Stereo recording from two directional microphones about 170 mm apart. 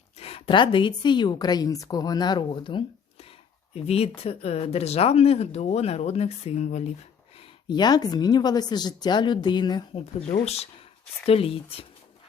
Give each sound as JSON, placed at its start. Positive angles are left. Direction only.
{"t": 0.2, "sound": "a woman's voice", "side_deg": 35}
{"t": 7.3, "sound": "a woman's voice", "side_deg": 25}
{"t": 10.2, "sound": "speech", "side_deg": 40}